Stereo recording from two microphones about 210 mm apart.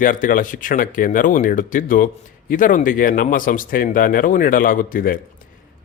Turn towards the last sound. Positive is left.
turn(degrees=40)  # may be behind; listen again after turning